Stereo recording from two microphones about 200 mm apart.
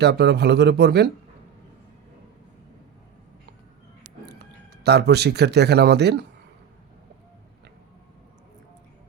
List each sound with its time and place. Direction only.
0.0 s speech: 55° right (ahead or behind)
4.4 s speech: 55° right (ahead or behind)